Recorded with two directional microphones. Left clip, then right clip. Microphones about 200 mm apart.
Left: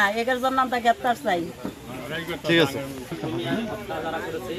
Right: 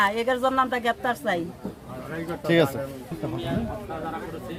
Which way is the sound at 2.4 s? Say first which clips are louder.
Left 1 dB; 60° right (ahead or behind).